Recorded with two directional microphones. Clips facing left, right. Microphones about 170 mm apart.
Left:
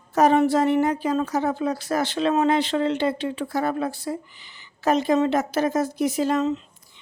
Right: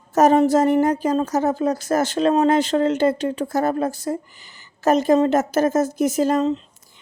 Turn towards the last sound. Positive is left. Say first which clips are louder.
# right 3 dB
turn(degrees=-35)  # may be behind; listen again after turning